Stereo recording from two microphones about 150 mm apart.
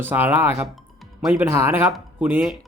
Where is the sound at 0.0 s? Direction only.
15° right (ahead or behind).